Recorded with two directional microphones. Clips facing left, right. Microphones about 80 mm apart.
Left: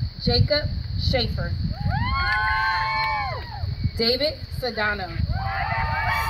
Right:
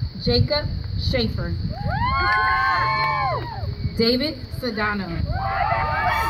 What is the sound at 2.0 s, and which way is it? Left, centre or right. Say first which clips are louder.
Speech: right 5 dB; centre.